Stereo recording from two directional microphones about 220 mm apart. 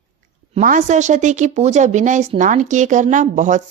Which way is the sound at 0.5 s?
35° right (ahead or behind).